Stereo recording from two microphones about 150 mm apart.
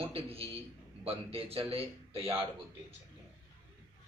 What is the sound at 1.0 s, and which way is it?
A man's voice, 40° right (ahead or behind).